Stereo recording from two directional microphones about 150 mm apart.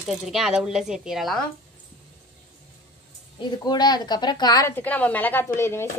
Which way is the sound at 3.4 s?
30° left (ahead or behind).